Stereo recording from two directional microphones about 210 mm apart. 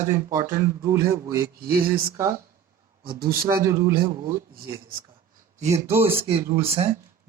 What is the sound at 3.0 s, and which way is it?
Speech, 45° right (ahead or behind).